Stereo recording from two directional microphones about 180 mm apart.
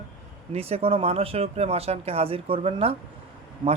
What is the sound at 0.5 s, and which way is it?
Speech, 35° right (ahead or behind).